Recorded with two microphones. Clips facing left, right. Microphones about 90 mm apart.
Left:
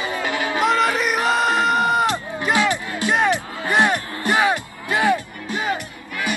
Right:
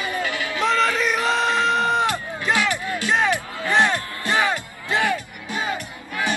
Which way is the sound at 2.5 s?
20° left (ahead or behind).